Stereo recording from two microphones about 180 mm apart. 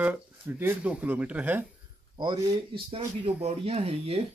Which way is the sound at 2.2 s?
25° right (ahead or behind).